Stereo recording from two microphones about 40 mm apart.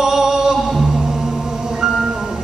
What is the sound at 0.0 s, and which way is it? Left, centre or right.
Music, centre.